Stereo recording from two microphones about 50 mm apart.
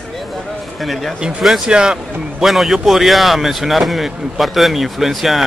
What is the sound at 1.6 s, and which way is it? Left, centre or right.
Speech, centre.